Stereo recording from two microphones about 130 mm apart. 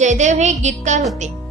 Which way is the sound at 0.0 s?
65° right (ahead or behind).